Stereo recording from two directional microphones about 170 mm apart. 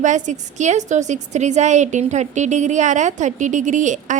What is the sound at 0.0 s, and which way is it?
A woman's voice, 45° right (ahead or behind).